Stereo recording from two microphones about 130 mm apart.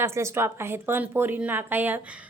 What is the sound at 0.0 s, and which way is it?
A woman's voice, 20° right (ahead or behind).